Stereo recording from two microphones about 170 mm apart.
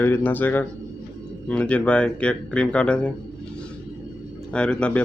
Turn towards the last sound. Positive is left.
turn(degrees=5)  # may be behind; listen again after turning